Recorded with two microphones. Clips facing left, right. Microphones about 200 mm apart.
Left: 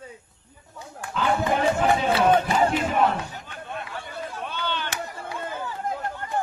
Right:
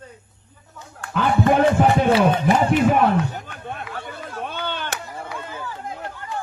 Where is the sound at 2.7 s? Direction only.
60° right (ahead or behind).